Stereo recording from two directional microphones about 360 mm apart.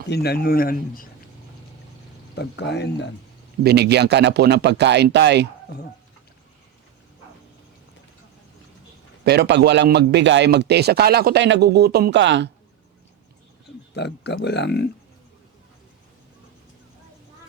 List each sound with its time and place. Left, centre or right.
0.0 s speech: left
2.3 s speech: left
3.6 s a man's voice: right
9.2 s a man's voice: right
13.9 s speech: left